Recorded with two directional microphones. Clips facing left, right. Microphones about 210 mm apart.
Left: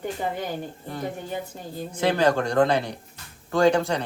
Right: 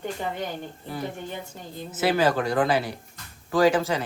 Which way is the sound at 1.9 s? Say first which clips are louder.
Left 1 dB; 5° right (ahead or behind).